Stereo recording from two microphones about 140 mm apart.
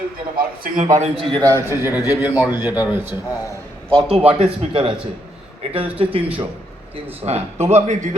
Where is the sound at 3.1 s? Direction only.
25° left (ahead or behind).